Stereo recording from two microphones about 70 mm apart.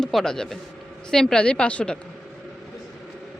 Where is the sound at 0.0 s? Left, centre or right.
Centre.